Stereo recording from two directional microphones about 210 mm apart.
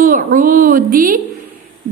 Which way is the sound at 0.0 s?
40° right (ahead or behind).